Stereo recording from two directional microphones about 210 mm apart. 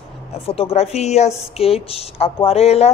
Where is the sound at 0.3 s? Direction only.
30° left (ahead or behind).